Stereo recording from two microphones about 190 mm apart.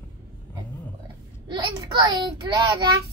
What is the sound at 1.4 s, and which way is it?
A woman's voice, 25° right (ahead or behind).